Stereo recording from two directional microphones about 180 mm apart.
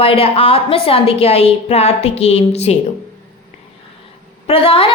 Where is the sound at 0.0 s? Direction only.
30° left (ahead or behind).